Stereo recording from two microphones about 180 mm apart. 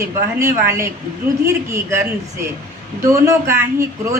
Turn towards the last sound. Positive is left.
turn(degrees=-15)  # may be behind; listen again after turning